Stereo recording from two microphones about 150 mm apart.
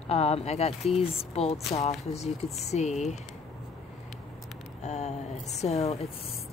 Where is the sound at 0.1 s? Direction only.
45° left (ahead or behind).